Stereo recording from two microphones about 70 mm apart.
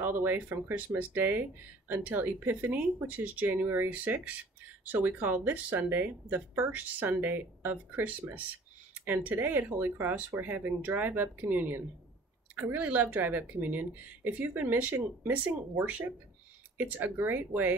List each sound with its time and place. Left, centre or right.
0.0 s speech: right